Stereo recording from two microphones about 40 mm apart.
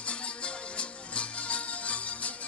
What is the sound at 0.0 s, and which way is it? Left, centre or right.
Music, left.